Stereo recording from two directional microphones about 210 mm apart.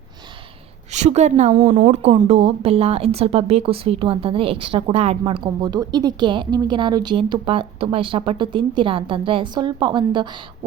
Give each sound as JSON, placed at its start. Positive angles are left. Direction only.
{"t": 0.9, "sound": "a woman's voice", "side_deg": -35}